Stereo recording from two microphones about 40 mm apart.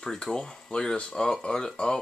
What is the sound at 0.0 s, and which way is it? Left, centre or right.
Speech, centre.